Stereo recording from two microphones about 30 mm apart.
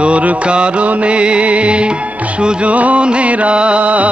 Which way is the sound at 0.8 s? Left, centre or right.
Right.